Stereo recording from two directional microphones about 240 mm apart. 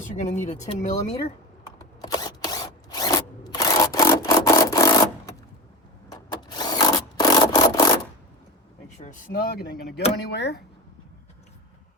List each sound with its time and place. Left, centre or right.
0.0 s speech: left
2.0 s camera: centre
6.5 s rub: centre
9.0 s speech: left